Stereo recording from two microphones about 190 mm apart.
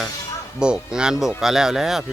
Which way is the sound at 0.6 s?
5° right (ahead or behind).